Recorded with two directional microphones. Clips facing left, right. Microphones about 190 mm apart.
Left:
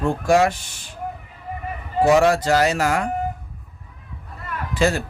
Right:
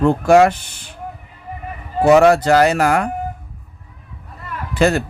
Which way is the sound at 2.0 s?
60° right (ahead or behind).